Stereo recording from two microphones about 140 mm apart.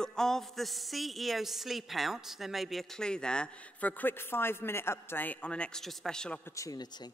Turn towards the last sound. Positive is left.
turn(degrees=25)  # may be behind; listen again after turning